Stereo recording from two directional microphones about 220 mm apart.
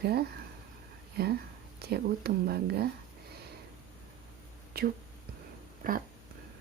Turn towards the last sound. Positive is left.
turn(degrees=-40)  # may be behind; listen again after turning